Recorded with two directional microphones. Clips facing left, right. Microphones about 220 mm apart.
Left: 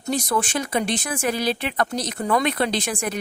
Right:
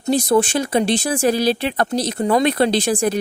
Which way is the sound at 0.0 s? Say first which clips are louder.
Right 8 dB; 30° right (ahead or behind).